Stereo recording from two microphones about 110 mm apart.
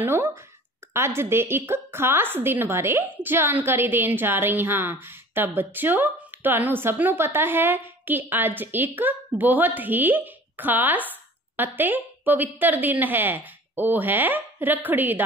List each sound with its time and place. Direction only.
0.0 s a woman's voice: 20° right (ahead or behind)